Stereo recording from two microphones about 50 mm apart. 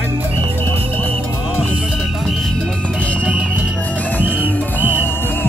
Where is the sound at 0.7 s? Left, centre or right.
Left.